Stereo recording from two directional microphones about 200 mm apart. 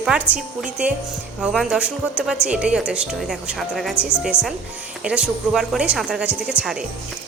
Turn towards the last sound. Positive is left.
turn(degrees=-5)  # may be behind; listen again after turning